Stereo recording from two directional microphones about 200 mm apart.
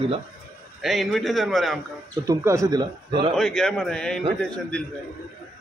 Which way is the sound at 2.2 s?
15° right (ahead or behind).